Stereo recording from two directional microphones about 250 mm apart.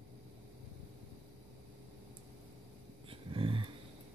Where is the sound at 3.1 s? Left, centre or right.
Right.